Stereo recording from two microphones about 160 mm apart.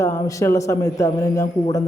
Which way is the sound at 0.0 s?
20° left (ahead or behind).